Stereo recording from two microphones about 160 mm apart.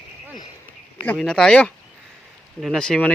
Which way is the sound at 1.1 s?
5° left (ahead or behind).